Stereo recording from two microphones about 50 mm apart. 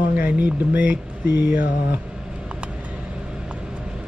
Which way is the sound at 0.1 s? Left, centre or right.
Right.